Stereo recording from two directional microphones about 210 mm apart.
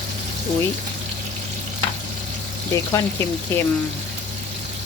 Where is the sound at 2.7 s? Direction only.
15° left (ahead or behind).